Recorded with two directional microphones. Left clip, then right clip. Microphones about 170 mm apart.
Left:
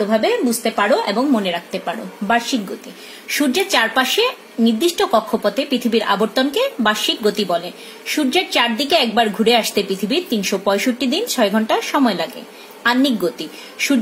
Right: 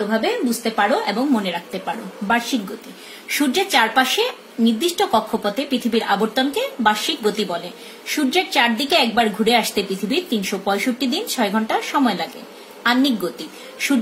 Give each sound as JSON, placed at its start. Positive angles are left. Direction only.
{"t": 0.1, "sound": "a woman's voice", "side_deg": 50}